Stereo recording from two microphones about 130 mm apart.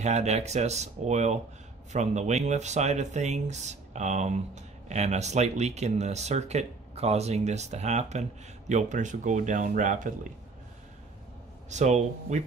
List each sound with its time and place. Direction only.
0.0 s speech: 60° right (ahead or behind); by 10.1 s 80° right
11.7 s speech: 65° right (ahead or behind)